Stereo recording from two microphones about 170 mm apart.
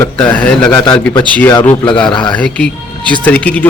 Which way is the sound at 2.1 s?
25° left (ahead or behind).